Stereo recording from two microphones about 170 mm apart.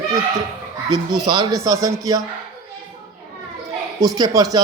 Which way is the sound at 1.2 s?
30° right (ahead or behind).